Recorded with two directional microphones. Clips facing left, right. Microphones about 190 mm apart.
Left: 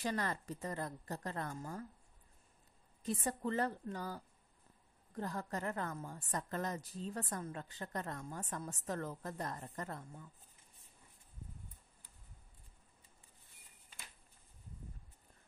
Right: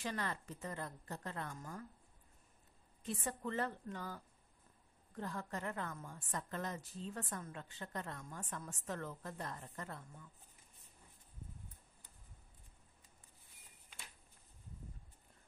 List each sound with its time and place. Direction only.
0.0 s a woman's voice: 40° left (ahead or behind)
3.0 s a woman's voice: 40° left (ahead or behind)